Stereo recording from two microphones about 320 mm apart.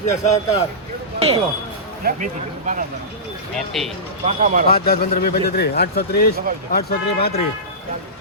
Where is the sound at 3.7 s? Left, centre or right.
Centre.